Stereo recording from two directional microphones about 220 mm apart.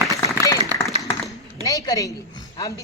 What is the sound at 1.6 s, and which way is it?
A man's voice, 15° left (ahead or behind).